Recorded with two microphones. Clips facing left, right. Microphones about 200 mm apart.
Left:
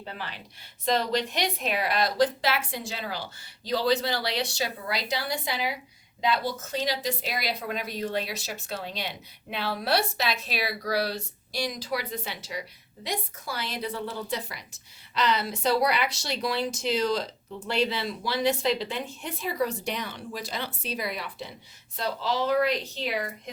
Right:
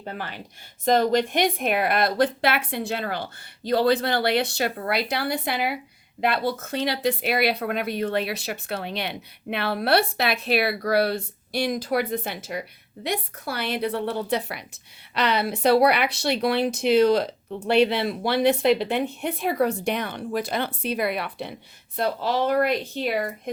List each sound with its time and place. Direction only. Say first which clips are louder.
0.0 s speech: right 5 dB; 50° right (ahead or behind)